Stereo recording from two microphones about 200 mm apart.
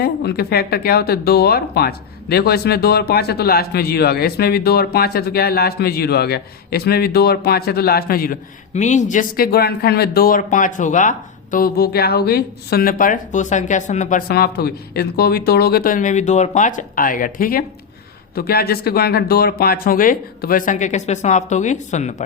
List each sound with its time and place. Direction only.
0.0 s speech: 50° left (ahead or behind)